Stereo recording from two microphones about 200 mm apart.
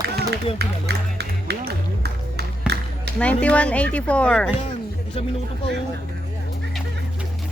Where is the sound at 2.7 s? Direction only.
55° right (ahead or behind).